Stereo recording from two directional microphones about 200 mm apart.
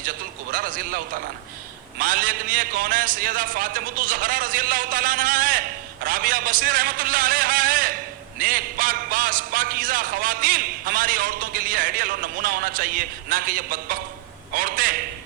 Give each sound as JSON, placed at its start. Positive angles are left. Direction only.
{"t": 0.5, "sound": "a man's voice", "side_deg": -45}